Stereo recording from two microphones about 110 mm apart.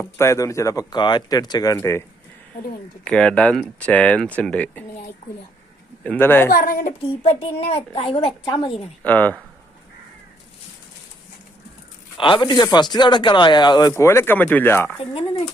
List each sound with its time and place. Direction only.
0.0 s speech: 25° left (ahead or behind)
1.8 s speech: 25° left (ahead or behind)
3.0 s speech: 10° left (ahead or behind)
6.0 s speech: 15° left (ahead or behind)
7.1 s a child's voice: 65° left (ahead or behind); by 8.8 s 45° left (ahead or behind)
9.0 s speech: 15° left (ahead or behind)
12.1 s speech: 45° left (ahead or behind)
13.9 s speech: 25° left (ahead or behind)